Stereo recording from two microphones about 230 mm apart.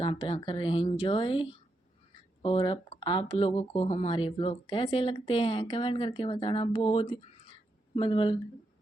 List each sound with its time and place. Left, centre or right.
0.0 s speech: left